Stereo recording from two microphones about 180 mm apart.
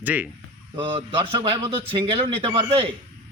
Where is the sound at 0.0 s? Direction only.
10° right (ahead or behind).